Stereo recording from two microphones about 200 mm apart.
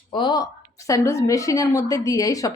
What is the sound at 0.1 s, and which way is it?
A woman's voice, 25° left (ahead or behind).